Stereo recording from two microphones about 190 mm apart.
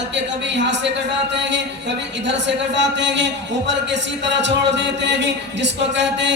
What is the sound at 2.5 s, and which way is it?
A man's voice, 65° right (ahead or behind).